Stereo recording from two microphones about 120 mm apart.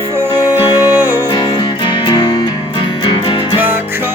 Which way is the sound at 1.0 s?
30° left (ahead or behind).